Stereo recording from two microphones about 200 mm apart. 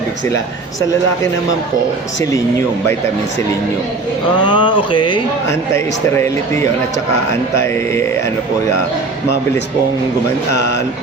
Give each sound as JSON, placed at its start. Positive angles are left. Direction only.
{"t": 4.4, "sound": "a sound", "side_deg": 25}
{"t": 5.7, "sound": "a man's voice", "side_deg": 15}
{"t": 10.5, "sound": "speech", "side_deg": 60}